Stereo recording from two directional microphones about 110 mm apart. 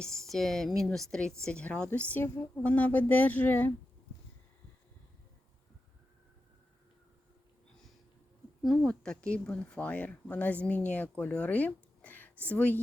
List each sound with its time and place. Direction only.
0.0 s a woman's voice: 5° left (ahead or behind)
8.6 s a woman's voice: centre (ahead or behind); by 12.8 s 15° left (ahead or behind)